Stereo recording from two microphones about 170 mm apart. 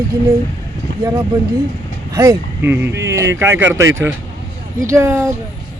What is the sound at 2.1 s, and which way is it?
Speech, 20° right (ahead or behind).